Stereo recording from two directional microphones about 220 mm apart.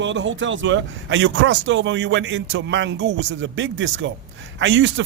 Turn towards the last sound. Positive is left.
turn(degrees=-55)  # may be behind; listen again after turning